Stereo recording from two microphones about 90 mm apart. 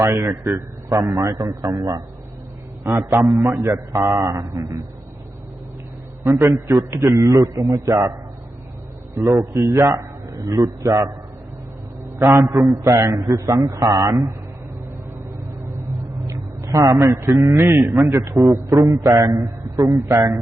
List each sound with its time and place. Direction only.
0.0 s a man's voice: 35° right (ahead or behind)
6.2 s a man's voice: 35° right (ahead or behind)
9.1 s a man's voice: 30° right (ahead or behind)
12.7 s a man's voice: 35° right (ahead or behind)
16.2 s a sound: 40° right (ahead or behind)
17.5 s a man's voice: 25° right (ahead or behind); by 20.0 s 45° right (ahead or behind)
20.1 s speech: 30° right (ahead or behind)